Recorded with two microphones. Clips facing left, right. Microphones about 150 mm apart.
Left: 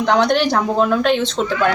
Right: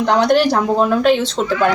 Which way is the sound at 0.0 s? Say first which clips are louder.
Right 2 dB; 5° right (ahead or behind).